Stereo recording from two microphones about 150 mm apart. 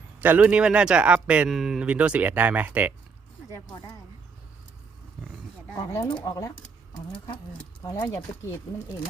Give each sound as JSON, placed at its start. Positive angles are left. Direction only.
{"t": 0.2, "sound": "speech", "side_deg": -10}
{"t": 5.7, "sound": "speech", "side_deg": 25}
{"t": 7.9, "sound": "speech", "side_deg": 20}